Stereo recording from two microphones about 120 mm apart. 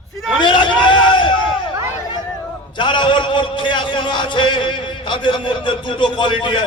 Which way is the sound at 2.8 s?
40° left (ahead or behind).